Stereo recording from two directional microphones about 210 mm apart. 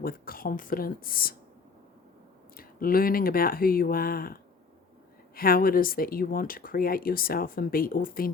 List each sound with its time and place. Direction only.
0.0 s speech: 45° left (ahead or behind)
2.6 s speech: 45° left (ahead or behind)